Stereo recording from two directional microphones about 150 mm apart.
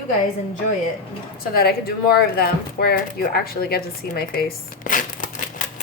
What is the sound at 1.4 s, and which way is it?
A woman's voice, 90° left.